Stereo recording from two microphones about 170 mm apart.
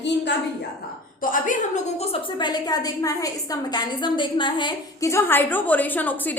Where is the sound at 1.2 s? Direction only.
50° left (ahead or behind).